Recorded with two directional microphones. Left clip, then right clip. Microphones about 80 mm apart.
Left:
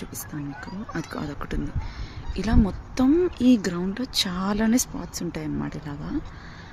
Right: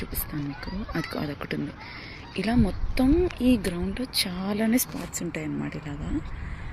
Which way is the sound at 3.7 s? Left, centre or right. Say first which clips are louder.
Left 2 dB; left.